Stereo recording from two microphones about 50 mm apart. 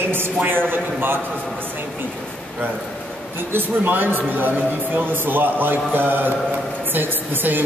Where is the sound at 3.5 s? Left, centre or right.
Right.